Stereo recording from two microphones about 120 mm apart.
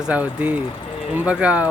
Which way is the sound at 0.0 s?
10° right (ahead or behind).